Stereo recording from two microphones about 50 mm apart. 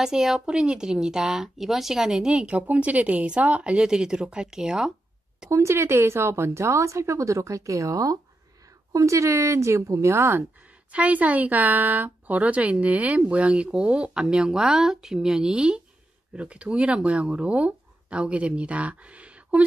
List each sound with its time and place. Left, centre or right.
0.0 s a woman's voice: centre
5.5 s speech: right
5.8 s speech: right
8.9 s speech: right
10.6 s speech: right